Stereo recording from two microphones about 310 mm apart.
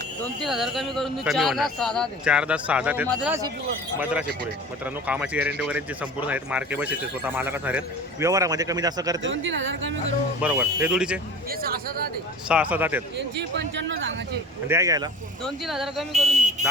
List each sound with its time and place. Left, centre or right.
0.4 s speech: centre
5.0 s speech: centre
9.2 s speech: right
10.4 s speech: centre
12.5 s speech: centre
13.1 s speech: right
14.7 s speech: centre
15.4 s speech: centre